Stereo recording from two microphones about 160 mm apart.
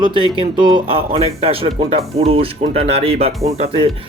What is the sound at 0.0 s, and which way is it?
Speech, 30° right (ahead or behind).